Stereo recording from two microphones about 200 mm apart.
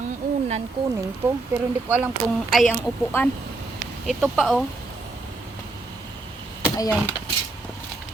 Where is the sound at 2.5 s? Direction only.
Centre (ahead or behind).